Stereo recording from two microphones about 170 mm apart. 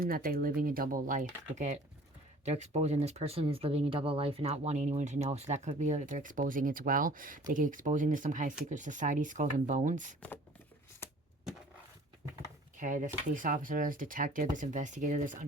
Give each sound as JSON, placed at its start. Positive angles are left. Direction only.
{"t": 0.0, "sound": "speech", "side_deg": -60}
{"t": 12.7, "sound": "speech", "side_deg": -50}